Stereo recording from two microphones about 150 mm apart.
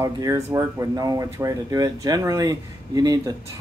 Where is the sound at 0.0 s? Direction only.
20° right (ahead or behind).